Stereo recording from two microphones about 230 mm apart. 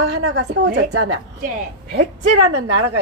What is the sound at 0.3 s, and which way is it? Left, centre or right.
Speech, right.